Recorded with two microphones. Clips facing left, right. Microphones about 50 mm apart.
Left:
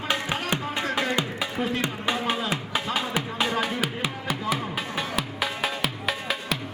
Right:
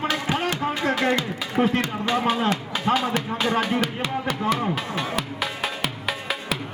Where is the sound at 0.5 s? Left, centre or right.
Left.